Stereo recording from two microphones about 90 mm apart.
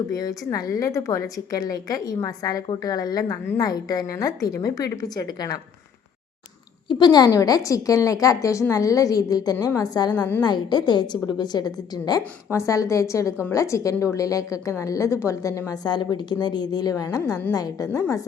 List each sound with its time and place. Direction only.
0.1 s a woman's voice: 45° left (ahead or behind)
6.8 s a woman's voice: 50° left (ahead or behind)
7.3 s a woman's voice: 40° left (ahead or behind)
12.5 s a woman's voice: 35° left (ahead or behind)